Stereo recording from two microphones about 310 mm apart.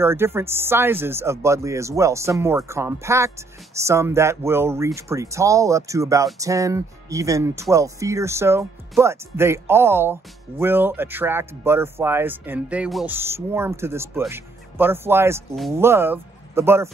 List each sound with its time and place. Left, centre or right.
0.0 s speech: centre